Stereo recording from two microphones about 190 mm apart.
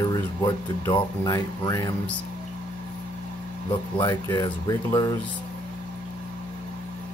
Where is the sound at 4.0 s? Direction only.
25° left (ahead or behind).